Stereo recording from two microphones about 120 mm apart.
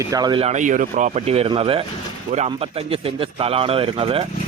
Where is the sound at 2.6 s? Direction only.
55° right (ahead or behind).